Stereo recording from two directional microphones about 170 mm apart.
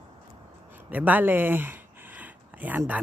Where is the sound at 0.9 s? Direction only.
10° right (ahead or behind).